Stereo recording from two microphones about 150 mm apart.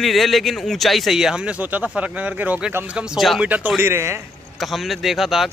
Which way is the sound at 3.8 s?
15° right (ahead or behind).